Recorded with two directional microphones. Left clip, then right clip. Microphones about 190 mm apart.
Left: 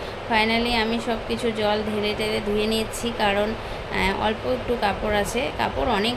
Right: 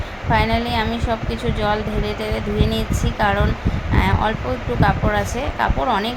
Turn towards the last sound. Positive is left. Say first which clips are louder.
# right 3 dB
turn(degrees=0)  # may be behind; listen again after turning